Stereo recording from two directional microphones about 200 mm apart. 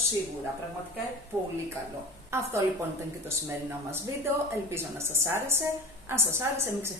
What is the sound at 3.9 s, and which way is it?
A woman's voice, 10° right (ahead or behind).